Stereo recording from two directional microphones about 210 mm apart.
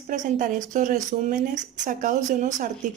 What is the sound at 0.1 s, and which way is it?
Speech, 35° right (ahead or behind).